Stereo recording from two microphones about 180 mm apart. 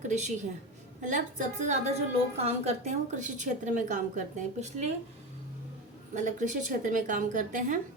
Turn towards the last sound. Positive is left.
turn(degrees=-45)  # may be behind; listen again after turning